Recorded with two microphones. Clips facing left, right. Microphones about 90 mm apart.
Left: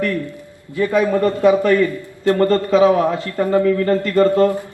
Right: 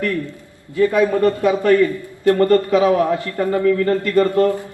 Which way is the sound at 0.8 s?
20° left (ahead or behind).